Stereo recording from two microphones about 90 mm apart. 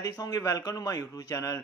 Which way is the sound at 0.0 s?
45° left (ahead or behind).